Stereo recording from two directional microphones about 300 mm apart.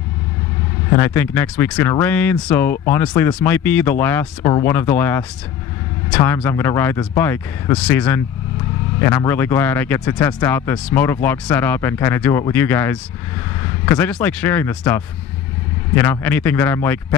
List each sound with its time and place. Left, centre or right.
0.9 s speech: centre